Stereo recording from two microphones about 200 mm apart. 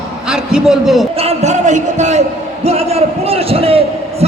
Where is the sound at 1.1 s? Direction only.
30° right (ahead or behind).